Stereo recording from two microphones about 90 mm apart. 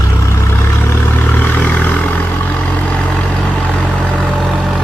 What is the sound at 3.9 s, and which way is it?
Vehicle, centre (ahead or behind).